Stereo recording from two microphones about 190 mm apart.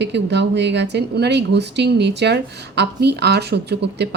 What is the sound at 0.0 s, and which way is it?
Speech, 65° right (ahead or behind).